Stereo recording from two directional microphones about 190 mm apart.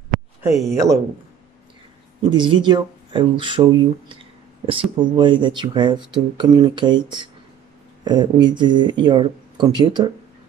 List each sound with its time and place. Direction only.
0.4 s speech: 15° right (ahead or behind)
2.2 s speech: 25° right (ahead or behind)